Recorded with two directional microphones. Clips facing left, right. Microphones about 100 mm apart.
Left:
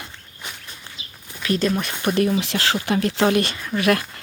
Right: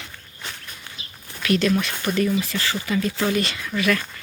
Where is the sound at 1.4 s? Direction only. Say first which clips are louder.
Right 1 dB; 30° left (ahead or behind).